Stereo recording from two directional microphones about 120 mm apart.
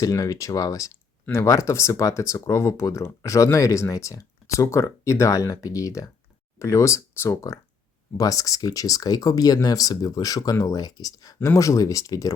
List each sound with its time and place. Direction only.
0.0 s speech: 30° left (ahead or behind)